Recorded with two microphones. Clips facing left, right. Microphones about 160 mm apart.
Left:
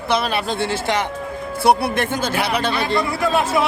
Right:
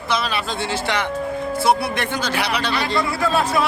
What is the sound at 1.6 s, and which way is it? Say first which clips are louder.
A man's voice: left 4 dB; 55° left (ahead or behind).